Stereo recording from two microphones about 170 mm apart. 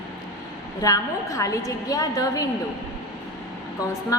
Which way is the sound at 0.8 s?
20° left (ahead or behind).